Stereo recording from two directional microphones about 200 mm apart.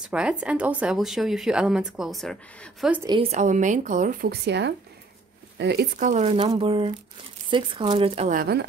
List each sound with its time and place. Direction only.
0.0 s a woman's voice: 5° right (ahead or behind)
3.2 s a woman's voice: 35° right (ahead or behind); by 5.9 s 55° right (ahead or behind)
5.9 s a woman's voice: 35° right (ahead or behind)
6.4 s speech: 25° right (ahead or behind)
8.4 s speech: 55° right (ahead or behind)